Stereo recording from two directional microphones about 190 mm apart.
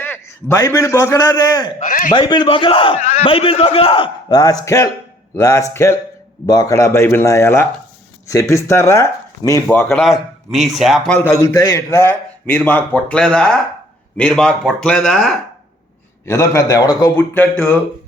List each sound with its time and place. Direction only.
0.0 s a man's voice: 10° left (ahead or behind)
1.9 s a man's voice: 45° left (ahead or behind)
2.1 s a man's voice: 25° left (ahead or behind)
9.6 s speech: 5° left (ahead or behind)
11.2 s a man's voice: 15° left (ahead or behind)
16.2 s a man's voice: 15° left (ahead or behind)